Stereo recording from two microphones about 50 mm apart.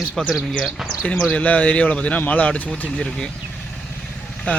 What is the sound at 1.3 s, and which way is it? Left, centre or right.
A man's voice, left.